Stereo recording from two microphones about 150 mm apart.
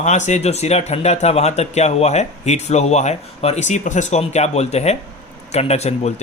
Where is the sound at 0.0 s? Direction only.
55° left (ahead or behind).